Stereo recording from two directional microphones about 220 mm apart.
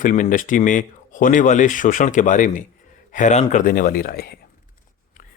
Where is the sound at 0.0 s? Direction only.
35° left (ahead or behind).